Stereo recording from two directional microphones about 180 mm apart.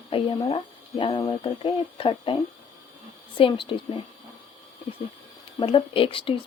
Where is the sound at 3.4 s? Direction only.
30° left (ahead or behind).